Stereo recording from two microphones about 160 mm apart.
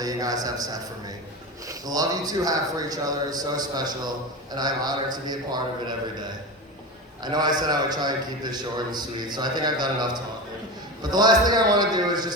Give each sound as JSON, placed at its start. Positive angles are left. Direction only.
{"t": 0.0, "sound": "a man's voice", "side_deg": -25}
{"t": 7.2, "sound": "a man's voice", "side_deg": -25}